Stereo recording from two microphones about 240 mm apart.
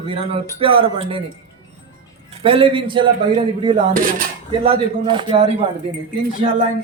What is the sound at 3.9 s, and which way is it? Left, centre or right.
Speech, right.